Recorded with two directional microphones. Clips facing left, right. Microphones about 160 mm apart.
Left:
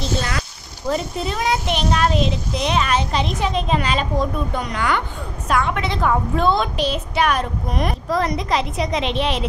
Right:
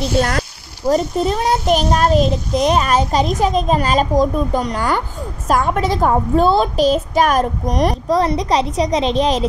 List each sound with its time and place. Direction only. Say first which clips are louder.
0.2 s a child's voice: right 8 dB; 50° right (ahead or behind)